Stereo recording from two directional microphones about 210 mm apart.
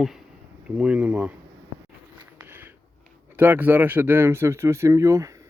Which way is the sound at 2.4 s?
10° right (ahead or behind).